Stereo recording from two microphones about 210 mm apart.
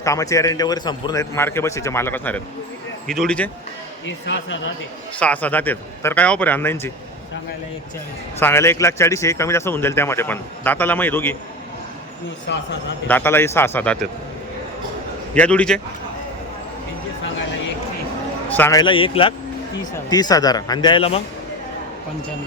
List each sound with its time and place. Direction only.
0.0 s a man's voice: 15° left (ahead or behind)
4.0 s speech: 60° left (ahead or behind)
5.2 s a man's voice: 5° left (ahead or behind)
8.4 s a man's voice: 10° left (ahead or behind)
12.5 s speech: 55° left (ahead or behind)
13.1 s a man's voice: 10° left (ahead or behind)
15.4 s speech: 5° left (ahead or behind)
18.4 s a man's voice: 10° left (ahead or behind); by 21.2 s 25° left (ahead or behind)